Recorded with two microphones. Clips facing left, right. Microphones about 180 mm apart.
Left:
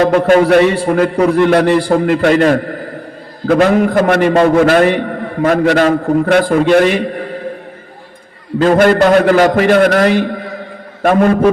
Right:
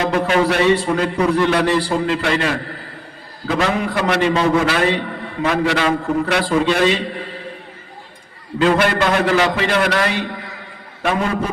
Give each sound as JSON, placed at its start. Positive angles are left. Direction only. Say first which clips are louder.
{"t": 0.1, "sound": "a man's voice", "louder": "left 8 dB", "side_deg": 55}
{"t": 8.5, "sound": "a man's voice", "louder": "left 7 dB", "side_deg": 45}